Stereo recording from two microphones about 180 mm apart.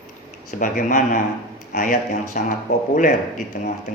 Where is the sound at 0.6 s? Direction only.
45° left (ahead or behind).